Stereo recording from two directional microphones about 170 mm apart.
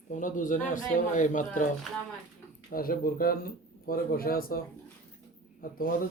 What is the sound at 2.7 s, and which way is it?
Speech, 60° left (ahead or behind).